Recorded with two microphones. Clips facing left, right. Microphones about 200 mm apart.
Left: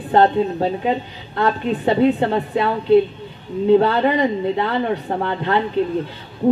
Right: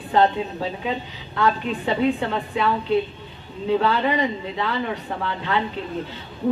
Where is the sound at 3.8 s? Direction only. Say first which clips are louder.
Left 5 dB; 50° left (ahead or behind).